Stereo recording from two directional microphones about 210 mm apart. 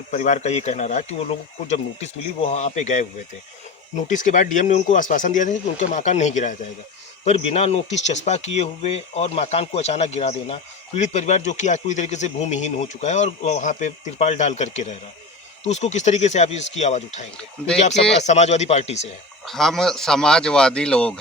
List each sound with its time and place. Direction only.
0.1 s speech: 35° left (ahead or behind)
19.5 s speech: centre (ahead or behind)